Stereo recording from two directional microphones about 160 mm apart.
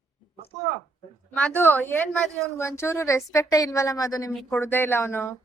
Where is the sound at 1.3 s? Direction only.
10° left (ahead or behind).